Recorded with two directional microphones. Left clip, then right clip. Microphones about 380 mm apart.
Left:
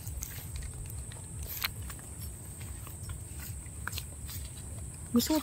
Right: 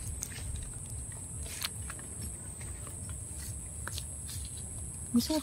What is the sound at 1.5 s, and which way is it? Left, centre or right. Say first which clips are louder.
Vehicle: left 3 dB; centre.